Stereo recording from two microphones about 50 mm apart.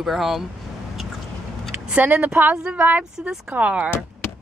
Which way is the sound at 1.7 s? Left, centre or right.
Right.